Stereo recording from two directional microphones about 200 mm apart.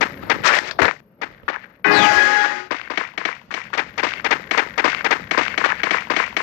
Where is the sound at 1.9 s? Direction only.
45° left (ahead or behind).